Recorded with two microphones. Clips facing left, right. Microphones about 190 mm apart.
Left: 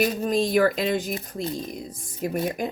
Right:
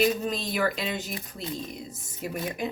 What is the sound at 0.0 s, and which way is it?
Speech, 45° left (ahead or behind).